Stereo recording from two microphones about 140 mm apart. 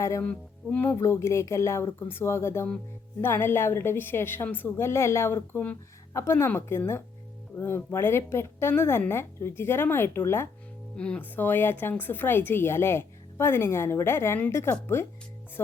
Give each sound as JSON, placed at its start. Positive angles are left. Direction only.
{"t": 0.0, "sound": "a woman's voice", "side_deg": 20}